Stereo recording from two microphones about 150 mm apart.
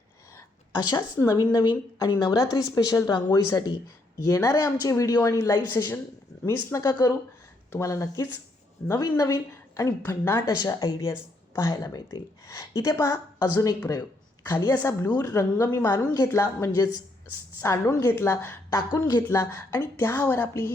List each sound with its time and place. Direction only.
0.3 s a sound: 25° left (ahead or behind)
1.1 s speech: 20° left (ahead or behind)
18.8 s a woman's voice: 30° left (ahead or behind)